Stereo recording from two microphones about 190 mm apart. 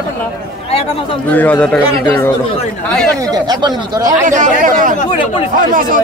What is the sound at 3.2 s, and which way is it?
Speech, 20° right (ahead or behind).